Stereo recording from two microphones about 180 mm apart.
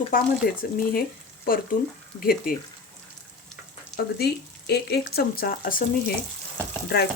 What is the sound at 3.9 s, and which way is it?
Speech, 65° left (ahead or behind).